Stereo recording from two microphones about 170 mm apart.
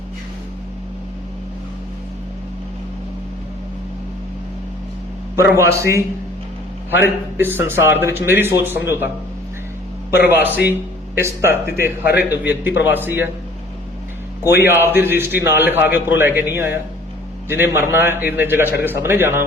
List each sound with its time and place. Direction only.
5.5 s a man's voice: 15° right (ahead or behind)
7.3 s a man's voice: 10° right (ahead or behind)
10.2 s a man's voice: 10° right (ahead or behind)
14.4 s a man's voice: 15° right (ahead or behind)